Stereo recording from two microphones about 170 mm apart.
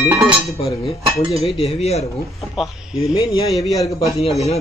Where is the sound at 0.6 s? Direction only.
35° left (ahead or behind).